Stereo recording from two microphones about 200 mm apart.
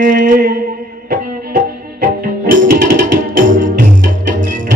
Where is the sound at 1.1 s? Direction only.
45° right (ahead or behind).